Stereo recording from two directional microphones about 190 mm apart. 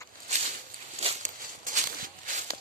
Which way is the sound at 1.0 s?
35° right (ahead or behind).